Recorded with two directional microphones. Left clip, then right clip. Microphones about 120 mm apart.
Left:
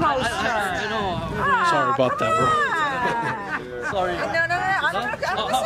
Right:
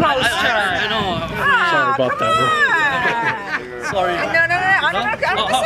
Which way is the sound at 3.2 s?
Centre (ahead or behind).